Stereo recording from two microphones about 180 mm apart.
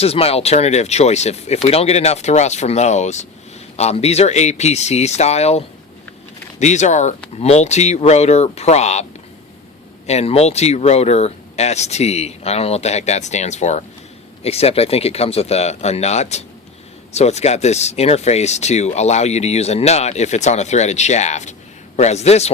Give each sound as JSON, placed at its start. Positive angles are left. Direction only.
{"t": 0.0, "sound": "speech", "side_deg": 35}
{"t": 10.1, "sound": "speech", "side_deg": 35}